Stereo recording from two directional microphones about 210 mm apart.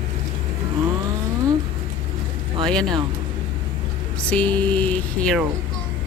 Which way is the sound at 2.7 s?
5° left (ahead or behind).